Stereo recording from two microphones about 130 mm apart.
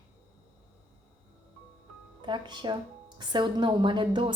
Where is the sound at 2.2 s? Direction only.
35° right (ahead or behind).